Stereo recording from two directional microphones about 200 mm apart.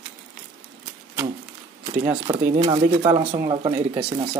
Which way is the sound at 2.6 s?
20° right (ahead or behind).